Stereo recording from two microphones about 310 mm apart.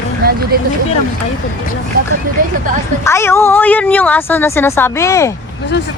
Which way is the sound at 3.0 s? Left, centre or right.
Centre.